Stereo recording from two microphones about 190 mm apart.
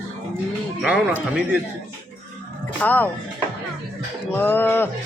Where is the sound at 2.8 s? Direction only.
10° left (ahead or behind).